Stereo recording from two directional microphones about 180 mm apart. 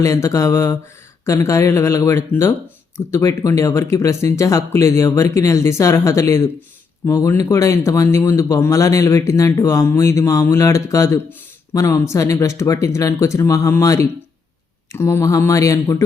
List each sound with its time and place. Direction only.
0.0 s speech: 20° left (ahead or behind)